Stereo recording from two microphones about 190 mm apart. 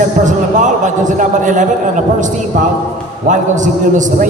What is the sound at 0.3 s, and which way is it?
A man's voice, 40° right (ahead or behind).